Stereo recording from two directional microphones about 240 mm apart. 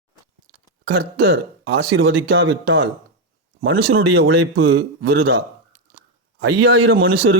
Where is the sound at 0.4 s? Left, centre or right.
Right.